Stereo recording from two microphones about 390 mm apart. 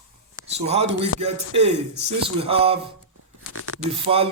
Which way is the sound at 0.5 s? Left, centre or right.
Right.